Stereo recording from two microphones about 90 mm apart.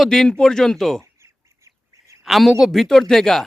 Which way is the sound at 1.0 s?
30° right (ahead or behind).